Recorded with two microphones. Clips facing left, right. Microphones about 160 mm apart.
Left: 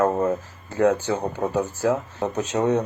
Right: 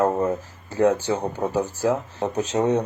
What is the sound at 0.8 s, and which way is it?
Speech, 35° right (ahead or behind).